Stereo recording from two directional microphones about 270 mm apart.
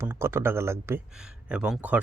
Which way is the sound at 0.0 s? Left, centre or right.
Centre.